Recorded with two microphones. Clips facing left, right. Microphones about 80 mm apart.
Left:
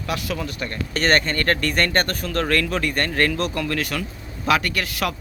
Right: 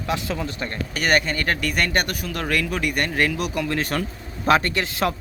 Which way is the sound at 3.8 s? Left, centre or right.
Right.